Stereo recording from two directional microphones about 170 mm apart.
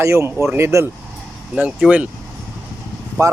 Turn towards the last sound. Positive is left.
turn(degrees=-15)  # may be behind; listen again after turning